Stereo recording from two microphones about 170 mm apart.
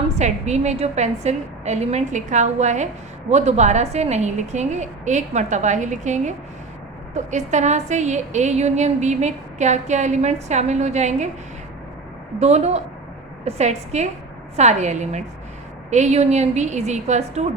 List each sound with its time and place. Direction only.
0.2 s a woman's voice: 40° right (ahead or behind)
12.4 s a woman's voice: 40° right (ahead or behind)